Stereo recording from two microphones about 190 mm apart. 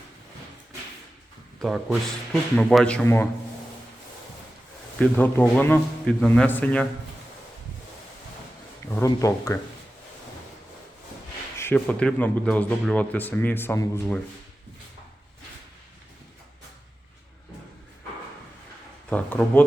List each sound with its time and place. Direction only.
1.6 s speech: 5° right (ahead or behind)
4.9 s a man's voice: 5° left (ahead or behind)
9.0 s a man's voice: 20° left (ahead or behind)
11.5 s a man's voice: 10° left (ahead or behind)
19.1 s a man's voice: 10° left (ahead or behind)